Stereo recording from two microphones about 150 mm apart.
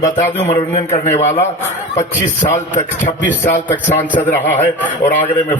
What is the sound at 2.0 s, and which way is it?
Speech, 55° left (ahead or behind).